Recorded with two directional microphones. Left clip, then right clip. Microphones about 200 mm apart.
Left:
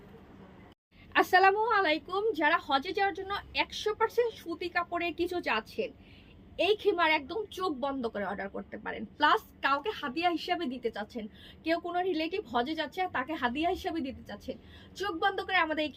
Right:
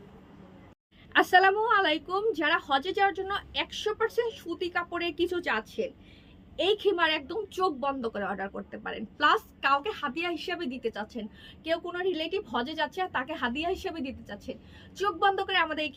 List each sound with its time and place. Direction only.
1.1 s a woman's voice: 20° right (ahead or behind)